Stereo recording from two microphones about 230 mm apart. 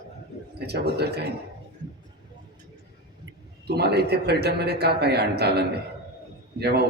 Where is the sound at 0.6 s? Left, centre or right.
Right.